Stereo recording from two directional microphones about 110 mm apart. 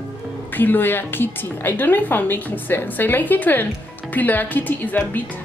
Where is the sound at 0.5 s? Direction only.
15° left (ahead or behind).